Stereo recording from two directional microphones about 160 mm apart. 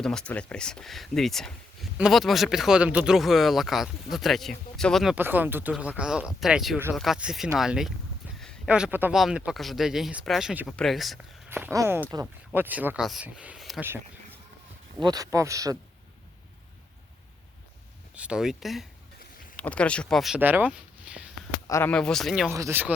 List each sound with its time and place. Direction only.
0.0 s speech: 5° left (ahead or behind)
5.1 s speech: 10° right (ahead or behind)
8.4 s a sound: centre (ahead or behind)
9.1 s speech: 5° right (ahead or behind)
11.4 s speech: 10° right (ahead or behind)
15.0 s speech: 20° right (ahead or behind)
18.1 s speech: 5° right (ahead or behind)
21.7 s speech: 15° left (ahead or behind)
21.9 s speech: 5° left (ahead or behind)
22.5 s speech: 15° right (ahead or behind)